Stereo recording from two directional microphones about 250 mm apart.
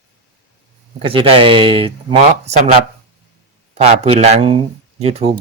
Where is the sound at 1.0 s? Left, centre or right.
Right.